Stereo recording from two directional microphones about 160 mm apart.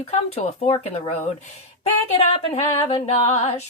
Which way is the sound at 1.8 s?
35° left (ahead or behind).